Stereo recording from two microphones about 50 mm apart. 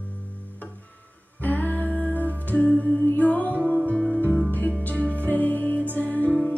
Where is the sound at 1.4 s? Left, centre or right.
Left.